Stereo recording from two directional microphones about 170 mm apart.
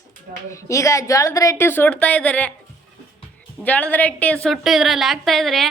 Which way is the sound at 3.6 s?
10° left (ahead or behind).